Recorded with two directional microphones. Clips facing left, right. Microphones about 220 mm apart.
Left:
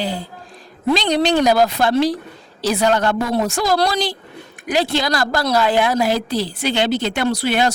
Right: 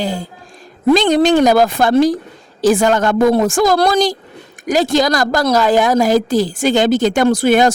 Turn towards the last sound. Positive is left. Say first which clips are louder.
# right 7 dB
turn(degrees=-45)  # may be behind; listen again after turning